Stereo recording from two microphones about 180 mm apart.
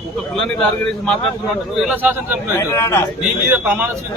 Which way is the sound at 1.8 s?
10° right (ahead or behind).